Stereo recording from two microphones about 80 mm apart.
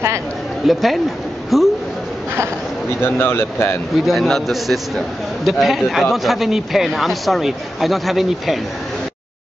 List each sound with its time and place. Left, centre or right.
0.7 s a man's voice: centre
3.0 s speech: left
4.0 s a man's voice: centre